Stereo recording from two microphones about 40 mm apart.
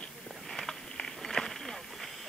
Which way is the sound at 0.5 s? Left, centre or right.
Centre.